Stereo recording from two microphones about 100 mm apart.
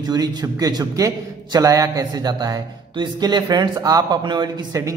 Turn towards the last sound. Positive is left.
turn(degrees=-40)  # may be behind; listen again after turning